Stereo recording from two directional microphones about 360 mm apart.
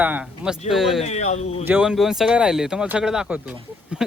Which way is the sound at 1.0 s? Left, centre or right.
Centre.